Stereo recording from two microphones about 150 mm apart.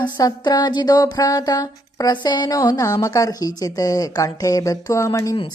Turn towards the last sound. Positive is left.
turn(degrees=20)  # may be behind; listen again after turning